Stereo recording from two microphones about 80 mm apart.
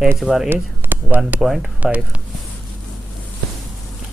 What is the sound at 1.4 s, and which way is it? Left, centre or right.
Speech, centre.